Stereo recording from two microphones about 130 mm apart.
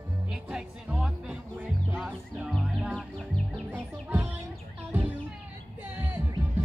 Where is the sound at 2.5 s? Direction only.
Centre (ahead or behind).